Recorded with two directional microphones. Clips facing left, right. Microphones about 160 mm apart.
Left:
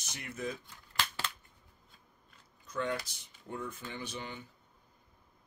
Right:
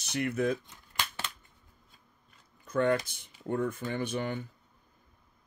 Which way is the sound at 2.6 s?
55° right (ahead or behind).